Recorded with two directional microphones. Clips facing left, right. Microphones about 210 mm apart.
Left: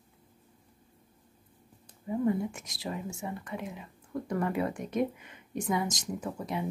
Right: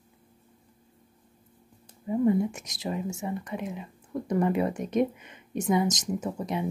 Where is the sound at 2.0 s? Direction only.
20° right (ahead or behind).